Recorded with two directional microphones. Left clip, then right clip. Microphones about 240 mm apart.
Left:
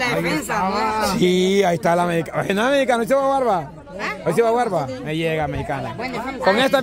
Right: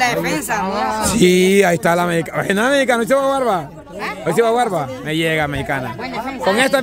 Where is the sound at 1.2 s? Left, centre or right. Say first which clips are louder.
Right 7 dB; centre.